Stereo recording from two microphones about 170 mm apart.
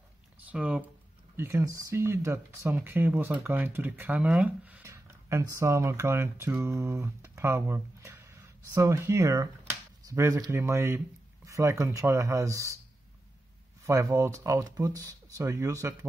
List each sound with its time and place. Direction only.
0.4 s speech: 10° right (ahead or behind)
13.8 s speech: 15° right (ahead or behind)